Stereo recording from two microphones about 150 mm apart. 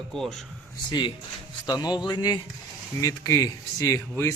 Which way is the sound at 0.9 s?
30° left (ahead or behind).